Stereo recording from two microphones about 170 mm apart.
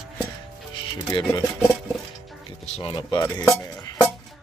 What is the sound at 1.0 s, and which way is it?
Cutlery, 25° left (ahead or behind).